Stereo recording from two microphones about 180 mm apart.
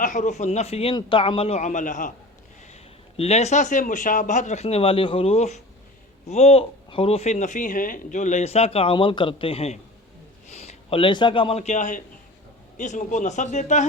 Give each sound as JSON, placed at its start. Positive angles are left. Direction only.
{"t": 0.0, "sound": "speech", "side_deg": 45}
{"t": 3.2, "sound": "a man's voice", "side_deg": 35}